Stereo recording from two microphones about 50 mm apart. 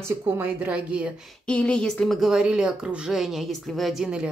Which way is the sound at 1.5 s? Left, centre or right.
Left.